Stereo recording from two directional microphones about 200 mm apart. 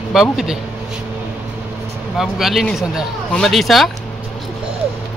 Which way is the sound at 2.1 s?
Centre (ahead or behind).